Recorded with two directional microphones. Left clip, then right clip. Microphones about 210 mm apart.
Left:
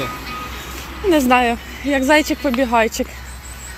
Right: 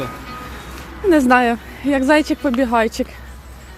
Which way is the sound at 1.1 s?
30° right (ahead or behind).